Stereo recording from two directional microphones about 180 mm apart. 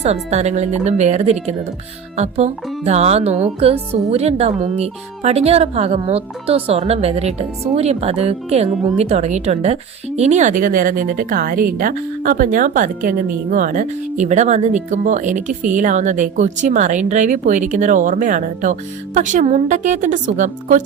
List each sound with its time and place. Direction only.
0.0 s a woman's voice: 40° right (ahead or behind)